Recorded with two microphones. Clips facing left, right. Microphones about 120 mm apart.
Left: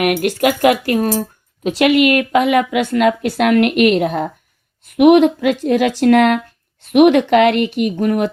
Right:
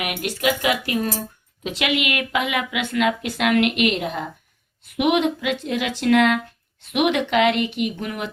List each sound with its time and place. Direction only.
0.0 s a woman's voice: 55° left (ahead or behind)